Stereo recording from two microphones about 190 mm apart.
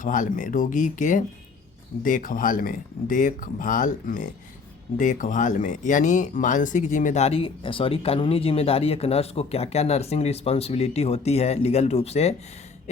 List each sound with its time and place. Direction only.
0.0 s speech: 45° left (ahead or behind)